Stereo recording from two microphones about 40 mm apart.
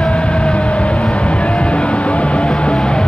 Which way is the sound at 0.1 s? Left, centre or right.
Left.